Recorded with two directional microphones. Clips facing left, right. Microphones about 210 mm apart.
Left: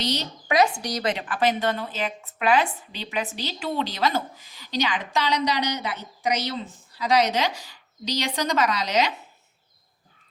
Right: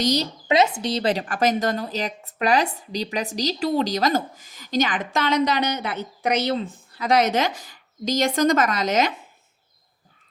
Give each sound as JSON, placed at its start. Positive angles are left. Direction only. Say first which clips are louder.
{"t": 0.0, "sound": "speech", "louder": "right 6 dB", "side_deg": -40}
{"t": 0.4, "sound": "a woman's voice", "louder": "right 1 dB", "side_deg": -25}